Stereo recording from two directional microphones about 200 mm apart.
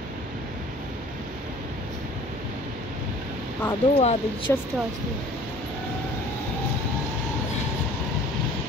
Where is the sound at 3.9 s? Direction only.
30° left (ahead or behind).